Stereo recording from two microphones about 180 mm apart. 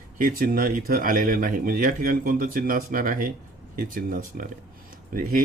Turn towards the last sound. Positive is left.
turn(degrees=-50)  # may be behind; listen again after turning